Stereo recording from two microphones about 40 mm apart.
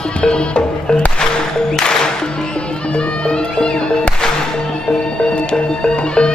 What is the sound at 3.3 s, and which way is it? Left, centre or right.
Music, left.